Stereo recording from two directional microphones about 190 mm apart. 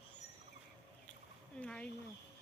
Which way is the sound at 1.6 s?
5° left (ahead or behind).